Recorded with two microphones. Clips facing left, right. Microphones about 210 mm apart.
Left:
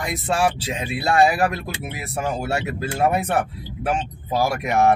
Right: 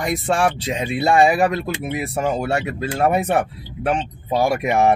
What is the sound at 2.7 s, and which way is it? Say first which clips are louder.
Speech: right 1 dB; 5° left (ahead or behind).